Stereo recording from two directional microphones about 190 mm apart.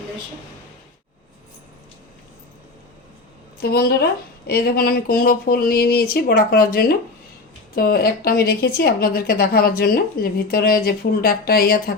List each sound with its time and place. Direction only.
3.6 s speech: 55° left (ahead or behind)